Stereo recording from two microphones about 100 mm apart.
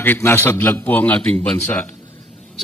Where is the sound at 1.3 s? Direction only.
25° left (ahead or behind).